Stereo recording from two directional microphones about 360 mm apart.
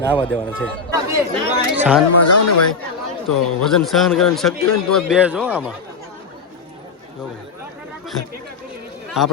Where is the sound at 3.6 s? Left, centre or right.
Centre.